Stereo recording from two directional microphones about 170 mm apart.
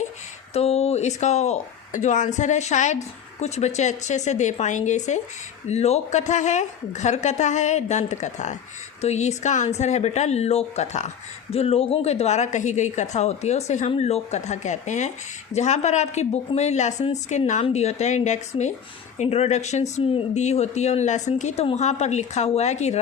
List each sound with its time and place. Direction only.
0.5 s speech: 40° left (ahead or behind)